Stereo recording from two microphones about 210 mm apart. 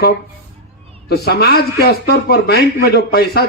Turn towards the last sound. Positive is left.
turn(degrees=50)  # may be behind; listen again after turning